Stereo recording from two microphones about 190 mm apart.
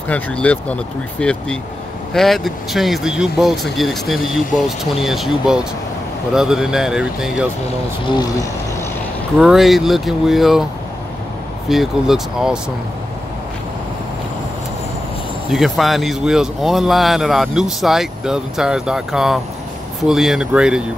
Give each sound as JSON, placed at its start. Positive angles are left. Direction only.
{"t": 0.1, "sound": "speech", "side_deg": 5}
{"t": 8.1, "sound": "speech", "side_deg": 20}
{"t": 9.4, "sound": "speech", "side_deg": 0}
{"t": 11.7, "sound": "speech", "side_deg": 0}
{"t": 15.5, "sound": "speech", "side_deg": 0}